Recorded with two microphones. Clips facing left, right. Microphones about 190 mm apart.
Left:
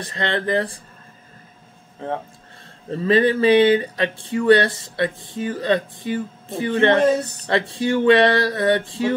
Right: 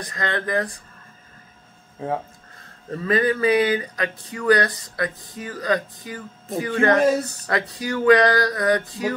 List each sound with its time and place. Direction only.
0.0 s speech: 30° left (ahead or behind)
2.9 s speech: 25° left (ahead or behind)
7.1 s a woman's voice: 10° right (ahead or behind)
7.4 s speech: 25° left (ahead or behind)